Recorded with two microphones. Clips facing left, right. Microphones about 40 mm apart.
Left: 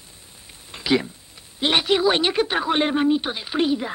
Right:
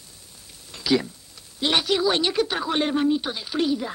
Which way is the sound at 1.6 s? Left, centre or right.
Left.